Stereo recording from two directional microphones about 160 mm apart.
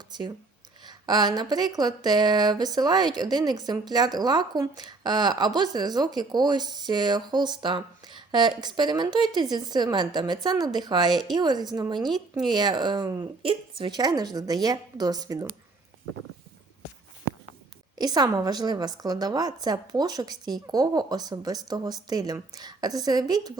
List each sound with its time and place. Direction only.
0.1 s speech: 25° right (ahead or behind)
17.9 s speech: 25° right (ahead or behind)